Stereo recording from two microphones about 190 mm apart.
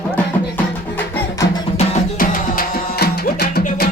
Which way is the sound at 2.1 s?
45° left (ahead or behind).